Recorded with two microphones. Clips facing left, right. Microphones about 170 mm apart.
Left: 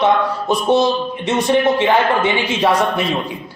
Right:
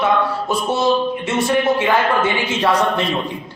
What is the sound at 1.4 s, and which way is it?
Speech, 20° left (ahead or behind).